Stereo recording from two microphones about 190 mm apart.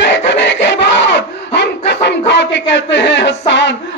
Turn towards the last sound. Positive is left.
turn(degrees=70)  # may be behind; listen again after turning